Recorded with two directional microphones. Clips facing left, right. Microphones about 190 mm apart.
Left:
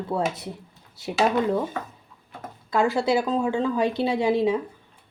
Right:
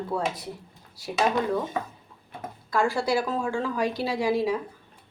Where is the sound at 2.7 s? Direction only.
20° left (ahead or behind).